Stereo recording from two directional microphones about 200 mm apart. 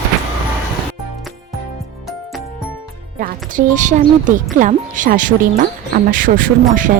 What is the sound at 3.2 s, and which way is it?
Speech, 40° right (ahead or behind).